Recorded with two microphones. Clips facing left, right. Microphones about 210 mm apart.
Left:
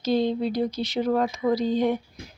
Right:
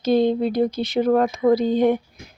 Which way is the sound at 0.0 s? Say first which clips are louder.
Right 5 dB; 55° right (ahead or behind).